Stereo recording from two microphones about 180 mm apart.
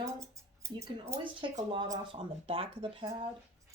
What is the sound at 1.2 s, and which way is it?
Speech, 25° right (ahead or behind).